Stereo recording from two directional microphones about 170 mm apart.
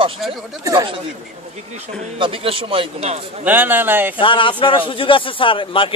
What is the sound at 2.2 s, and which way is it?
Speech, 35° right (ahead or behind).